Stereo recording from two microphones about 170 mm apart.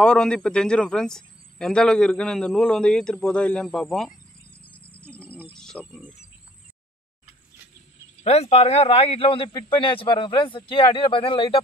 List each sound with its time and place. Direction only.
0.0 s a man's voice: 5° left (ahead or behind)
5.0 s a sound: 5° left (ahead or behind)
5.5 s speech: 5° left (ahead or behind)
8.2 s speech: 40° left (ahead or behind)